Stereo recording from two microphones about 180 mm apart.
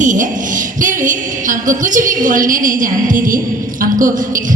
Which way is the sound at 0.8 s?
45° right (ahead or behind).